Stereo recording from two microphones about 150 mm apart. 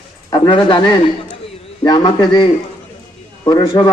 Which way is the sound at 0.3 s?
30° left (ahead or behind).